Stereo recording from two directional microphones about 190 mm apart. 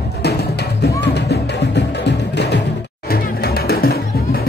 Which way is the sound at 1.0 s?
60° left (ahead or behind).